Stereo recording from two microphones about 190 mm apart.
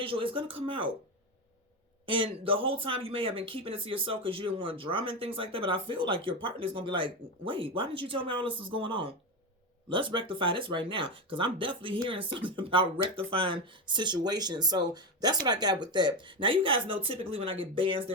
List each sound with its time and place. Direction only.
0.0 s speech: 30° right (ahead or behind)
2.0 s speech: 25° right (ahead or behind)